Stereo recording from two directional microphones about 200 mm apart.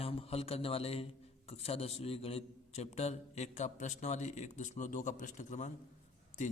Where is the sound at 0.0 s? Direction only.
30° left (ahead or behind).